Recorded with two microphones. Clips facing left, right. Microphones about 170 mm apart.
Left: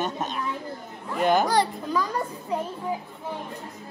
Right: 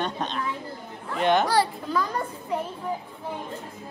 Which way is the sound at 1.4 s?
15° left (ahead or behind).